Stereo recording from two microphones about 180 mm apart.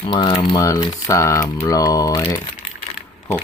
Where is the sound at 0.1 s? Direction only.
25° left (ahead or behind).